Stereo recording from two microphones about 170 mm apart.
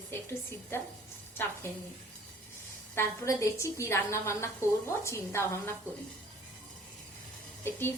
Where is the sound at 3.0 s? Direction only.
15° left (ahead or behind).